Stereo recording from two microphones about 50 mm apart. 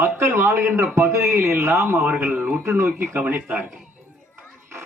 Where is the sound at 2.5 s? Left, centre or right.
Right.